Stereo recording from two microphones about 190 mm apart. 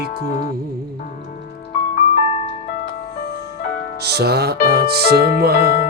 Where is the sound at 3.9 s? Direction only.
55° right (ahead or behind).